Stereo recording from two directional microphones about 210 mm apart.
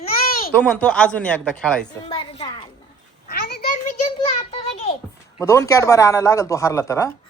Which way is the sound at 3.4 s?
50° left (ahead or behind).